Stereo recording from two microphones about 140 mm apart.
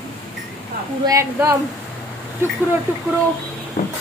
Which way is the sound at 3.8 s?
70° left (ahead or behind).